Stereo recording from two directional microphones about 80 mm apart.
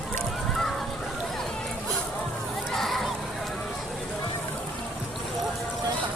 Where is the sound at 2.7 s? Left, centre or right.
Centre.